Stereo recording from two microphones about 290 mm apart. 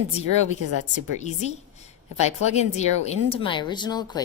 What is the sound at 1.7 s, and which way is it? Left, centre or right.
A woman's voice, left.